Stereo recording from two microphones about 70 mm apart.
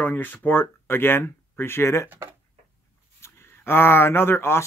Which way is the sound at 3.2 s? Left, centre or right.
Left.